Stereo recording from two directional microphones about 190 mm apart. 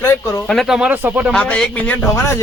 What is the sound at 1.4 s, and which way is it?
Speech, 5° left (ahead or behind).